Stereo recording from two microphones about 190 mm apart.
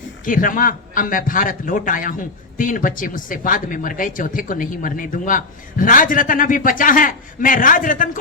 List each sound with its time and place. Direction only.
0.3 s speech: 45° left (ahead or behind)